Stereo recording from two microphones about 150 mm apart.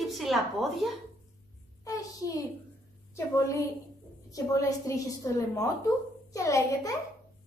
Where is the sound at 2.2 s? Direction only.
20° left (ahead or behind).